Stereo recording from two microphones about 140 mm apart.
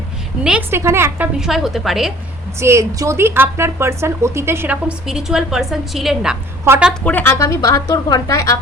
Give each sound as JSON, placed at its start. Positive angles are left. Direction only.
{"t": 0.7, "sound": "a woman's voice", "side_deg": -20}
{"t": 1.4, "sound": "a woman's voice", "side_deg": -5}
{"t": 2.6, "sound": "a woman's voice", "side_deg": -20}
{"t": 7.0, "sound": "a woman's voice", "side_deg": 15}